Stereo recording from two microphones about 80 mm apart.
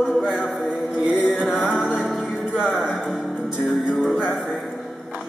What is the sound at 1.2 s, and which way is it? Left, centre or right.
Music, centre.